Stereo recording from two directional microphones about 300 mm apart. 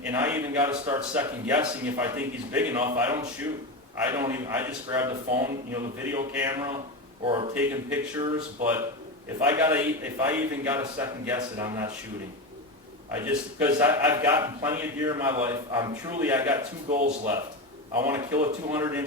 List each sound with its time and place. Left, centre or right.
0.0 s a man's voice: centre
7.5 s a man's voice: centre
13.1 s a man's voice: centre
16.9 s speech: right
18.0 s a man's voice: centre